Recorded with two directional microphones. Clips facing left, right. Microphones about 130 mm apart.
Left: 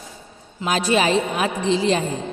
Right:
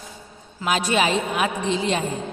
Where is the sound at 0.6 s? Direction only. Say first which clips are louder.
Left 2 dB; 35° left (ahead or behind).